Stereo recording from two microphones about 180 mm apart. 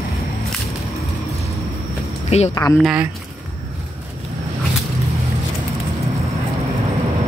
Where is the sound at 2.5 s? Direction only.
20° left (ahead or behind).